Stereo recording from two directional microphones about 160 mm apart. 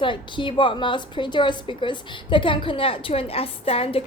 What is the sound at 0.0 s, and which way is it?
A woman's voice, 30° left (ahead or behind).